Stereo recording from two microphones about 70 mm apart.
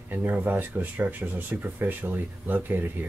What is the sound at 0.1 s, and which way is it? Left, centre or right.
Speech, right.